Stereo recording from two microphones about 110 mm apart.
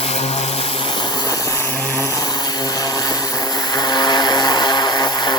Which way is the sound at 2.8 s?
35° left (ahead or behind).